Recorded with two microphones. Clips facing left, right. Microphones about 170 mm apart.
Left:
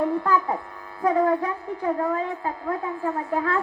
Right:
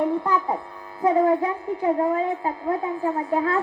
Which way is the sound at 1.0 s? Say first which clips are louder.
Right 2 dB; 25° right (ahead or behind).